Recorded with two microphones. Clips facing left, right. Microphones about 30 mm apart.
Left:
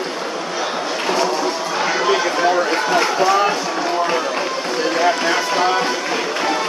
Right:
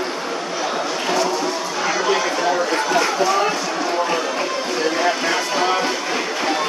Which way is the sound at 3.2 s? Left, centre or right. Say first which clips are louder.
Left 3 dB; centre.